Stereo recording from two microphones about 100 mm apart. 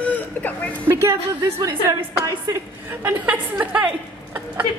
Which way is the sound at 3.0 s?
15° right (ahead or behind).